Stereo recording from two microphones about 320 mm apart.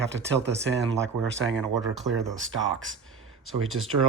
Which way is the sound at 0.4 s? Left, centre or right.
Right.